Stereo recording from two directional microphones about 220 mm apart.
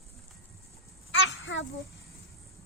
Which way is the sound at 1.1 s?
60° left (ahead or behind).